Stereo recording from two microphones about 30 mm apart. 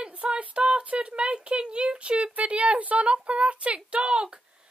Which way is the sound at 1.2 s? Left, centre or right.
Right.